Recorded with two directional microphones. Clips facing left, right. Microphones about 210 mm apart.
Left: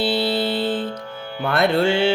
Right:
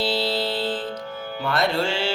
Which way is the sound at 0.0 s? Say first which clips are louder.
Left 3 dB; 60° left (ahead or behind).